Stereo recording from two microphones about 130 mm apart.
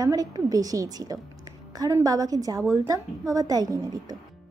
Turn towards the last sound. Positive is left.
turn(degrees=-30)  # may be behind; listen again after turning